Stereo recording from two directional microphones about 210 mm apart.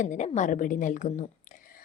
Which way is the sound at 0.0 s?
35° left (ahead or behind).